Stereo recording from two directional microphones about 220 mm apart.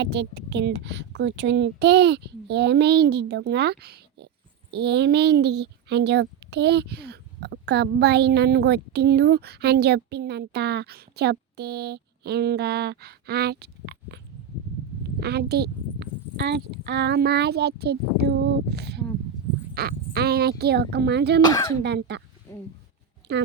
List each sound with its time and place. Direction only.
0.0 s speech: 50° right (ahead or behind)
15.2 s speech: 45° right (ahead or behind)
21.4 s speech: 15° left (ahead or behind)
21.8 s speech: 50° right (ahead or behind)
22.5 s a sound: 10° left (ahead or behind)
23.3 s speech: 50° right (ahead or behind)